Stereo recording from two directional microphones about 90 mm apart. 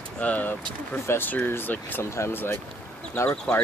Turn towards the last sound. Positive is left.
turn(degrees=15)  # may be behind; listen again after turning